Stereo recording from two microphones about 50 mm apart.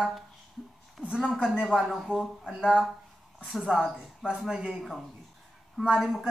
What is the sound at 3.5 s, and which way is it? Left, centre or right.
A man's voice, centre.